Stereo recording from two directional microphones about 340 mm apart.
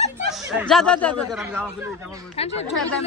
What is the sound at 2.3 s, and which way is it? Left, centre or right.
Speech, centre.